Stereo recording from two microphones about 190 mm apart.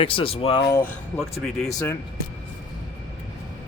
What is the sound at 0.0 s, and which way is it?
Speech, 30° left (ahead or behind).